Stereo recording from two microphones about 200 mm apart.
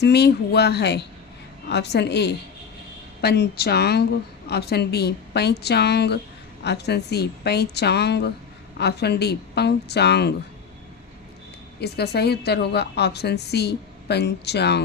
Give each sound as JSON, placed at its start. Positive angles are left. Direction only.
{"t": 0.0, "sound": "a woman's voice", "side_deg": 55}
{"t": 11.8, "sound": "a woman's voice", "side_deg": 55}